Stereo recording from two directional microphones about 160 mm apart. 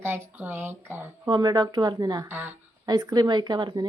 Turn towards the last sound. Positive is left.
turn(degrees=-25)  # may be behind; listen again after turning